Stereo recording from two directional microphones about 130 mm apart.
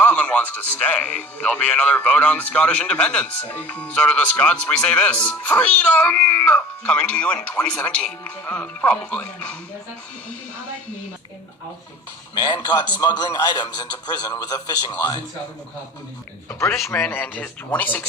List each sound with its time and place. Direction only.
0.0 s speech: 10° left (ahead or behind)
12.3 s a man's voice: 30° left (ahead or behind)
17.1 s speech: 15° left (ahead or behind)